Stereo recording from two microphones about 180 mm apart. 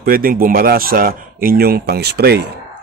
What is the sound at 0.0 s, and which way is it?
Speech, 55° right (ahead or behind).